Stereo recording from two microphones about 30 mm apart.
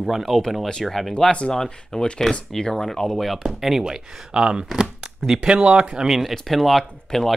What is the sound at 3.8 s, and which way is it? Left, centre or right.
Speech, right.